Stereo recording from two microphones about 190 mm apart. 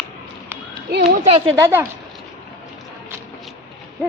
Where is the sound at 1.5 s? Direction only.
15° right (ahead or behind).